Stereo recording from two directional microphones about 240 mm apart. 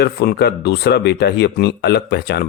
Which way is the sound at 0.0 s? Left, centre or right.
Left.